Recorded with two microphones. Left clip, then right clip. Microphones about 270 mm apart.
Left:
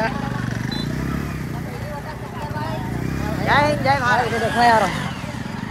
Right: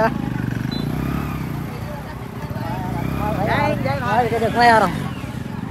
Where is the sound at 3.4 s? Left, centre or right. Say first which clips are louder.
Left 6 dB; left.